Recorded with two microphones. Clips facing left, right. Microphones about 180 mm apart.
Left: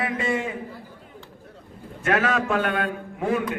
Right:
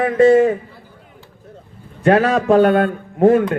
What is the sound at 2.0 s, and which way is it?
A man's voice, 35° right (ahead or behind).